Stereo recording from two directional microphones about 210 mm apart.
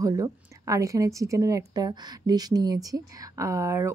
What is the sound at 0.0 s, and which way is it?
A woman's voice, 15° right (ahead or behind).